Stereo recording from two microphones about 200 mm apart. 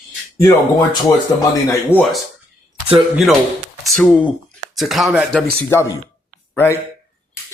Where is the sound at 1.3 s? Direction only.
15° left (ahead or behind).